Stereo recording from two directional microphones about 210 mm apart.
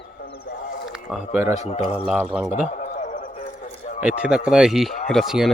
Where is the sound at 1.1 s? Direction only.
10° right (ahead or behind).